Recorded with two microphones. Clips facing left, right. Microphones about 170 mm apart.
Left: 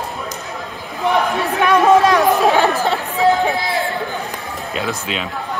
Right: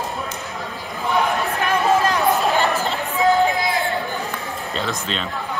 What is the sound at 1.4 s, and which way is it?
Chatter, 70° left (ahead or behind).